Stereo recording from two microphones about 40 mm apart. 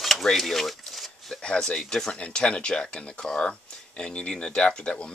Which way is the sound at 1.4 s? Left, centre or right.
Centre.